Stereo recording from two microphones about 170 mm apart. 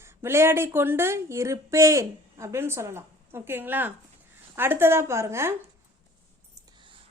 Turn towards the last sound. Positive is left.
turn(degrees=-15)  # may be behind; listen again after turning